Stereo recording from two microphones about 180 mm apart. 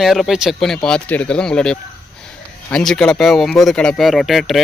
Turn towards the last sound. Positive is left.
turn(degrees=0)  # may be behind; listen again after turning